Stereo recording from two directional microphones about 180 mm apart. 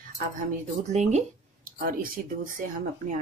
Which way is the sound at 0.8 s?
40° right (ahead or behind).